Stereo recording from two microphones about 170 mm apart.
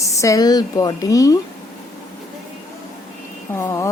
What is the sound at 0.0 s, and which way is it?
A woman's voice, 20° left (ahead or behind).